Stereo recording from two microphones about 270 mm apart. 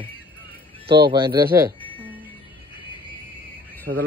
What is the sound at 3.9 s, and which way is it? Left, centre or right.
Speech, right.